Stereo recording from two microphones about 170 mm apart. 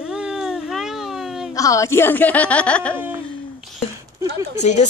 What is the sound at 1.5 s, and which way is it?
Speech, 20° left (ahead or behind).